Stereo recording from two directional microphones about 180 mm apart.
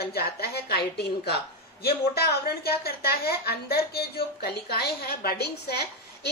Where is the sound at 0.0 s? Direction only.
60° left (ahead or behind).